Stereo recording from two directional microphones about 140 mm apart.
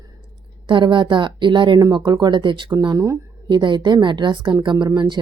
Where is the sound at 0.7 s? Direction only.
35° right (ahead or behind).